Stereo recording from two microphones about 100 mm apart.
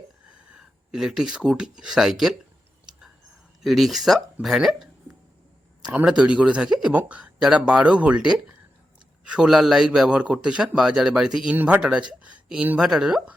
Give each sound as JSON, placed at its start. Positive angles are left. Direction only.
{"t": 0.3, "sound": "speech", "side_deg": -10}
{"t": 3.6, "sound": "speech", "side_deg": 0}
{"t": 5.9, "sound": "a man's voice", "side_deg": -10}
{"t": 11.5, "sound": "a man's voice", "side_deg": -20}